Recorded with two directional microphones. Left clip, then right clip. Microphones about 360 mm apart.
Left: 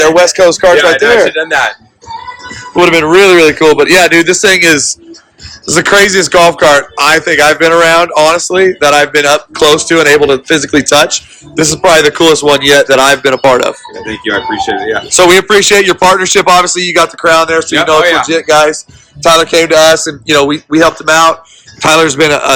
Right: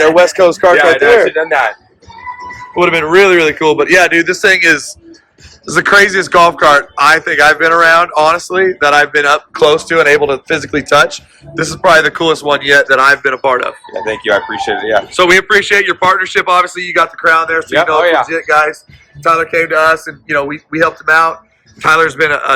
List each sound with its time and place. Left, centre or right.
0.0 s a man's voice: centre
2.7 s a man's voice: centre
14.0 s speech: right
15.1 s speech: centre
18.0 s speech: right
18.3 s speech: centre